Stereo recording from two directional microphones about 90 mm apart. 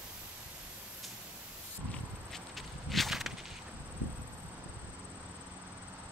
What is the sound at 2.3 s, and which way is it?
Walk, centre (ahead or behind).